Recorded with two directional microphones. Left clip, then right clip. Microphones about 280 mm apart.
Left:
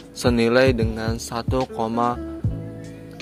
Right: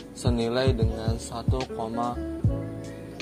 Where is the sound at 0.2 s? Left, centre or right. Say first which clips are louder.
Left 9 dB; left.